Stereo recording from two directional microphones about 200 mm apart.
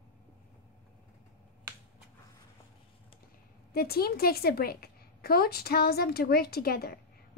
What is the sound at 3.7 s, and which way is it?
A woman's voice, 50° left (ahead or behind).